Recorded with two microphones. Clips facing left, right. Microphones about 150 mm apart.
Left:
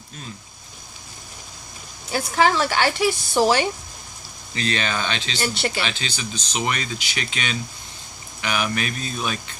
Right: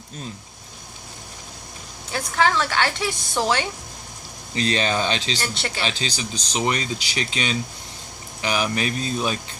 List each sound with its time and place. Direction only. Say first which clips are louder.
2.1 s speech: left 2 dB; 10° left (ahead or behind)
4.5 s speech: right 3 dB; 35° right (ahead or behind)
5.4 s speech: left 4 dB; 10° left (ahead or behind)
5.8 s speech: right 2 dB; 35° right (ahead or behind)